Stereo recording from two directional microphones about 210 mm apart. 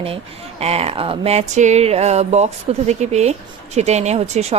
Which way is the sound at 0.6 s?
30° right (ahead or behind).